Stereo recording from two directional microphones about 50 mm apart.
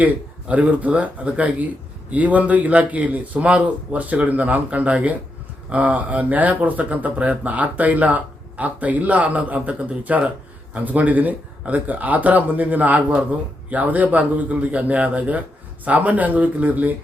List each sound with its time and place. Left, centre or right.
0.0 s a man's voice: right